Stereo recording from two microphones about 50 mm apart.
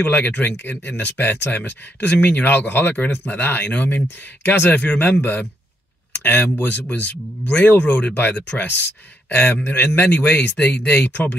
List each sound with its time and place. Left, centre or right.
0.0 s speech: left